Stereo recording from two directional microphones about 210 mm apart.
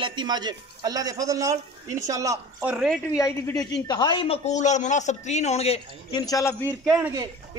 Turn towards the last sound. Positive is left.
turn(degrees=-5)  # may be behind; listen again after turning